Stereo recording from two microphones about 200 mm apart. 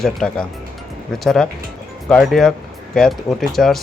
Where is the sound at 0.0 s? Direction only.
5° left (ahead or behind).